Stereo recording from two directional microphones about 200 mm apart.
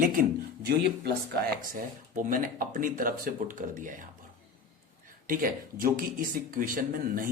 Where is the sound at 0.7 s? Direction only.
55° right (ahead or behind).